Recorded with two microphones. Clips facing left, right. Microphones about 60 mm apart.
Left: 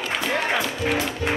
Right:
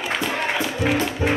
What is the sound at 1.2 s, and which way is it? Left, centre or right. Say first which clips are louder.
Music: right 4 dB; right.